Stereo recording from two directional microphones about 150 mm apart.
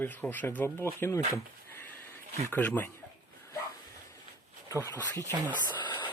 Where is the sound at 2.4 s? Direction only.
15° left (ahead or behind).